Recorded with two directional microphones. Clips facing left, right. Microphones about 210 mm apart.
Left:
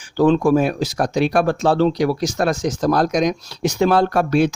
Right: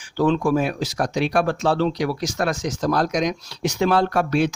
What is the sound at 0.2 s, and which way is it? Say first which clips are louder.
Speech: left 5 dB; 40° left (ahead or behind).